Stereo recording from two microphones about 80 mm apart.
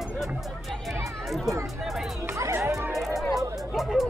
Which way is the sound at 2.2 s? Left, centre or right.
Right.